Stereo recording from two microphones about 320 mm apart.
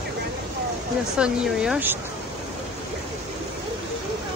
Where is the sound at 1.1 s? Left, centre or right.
Centre.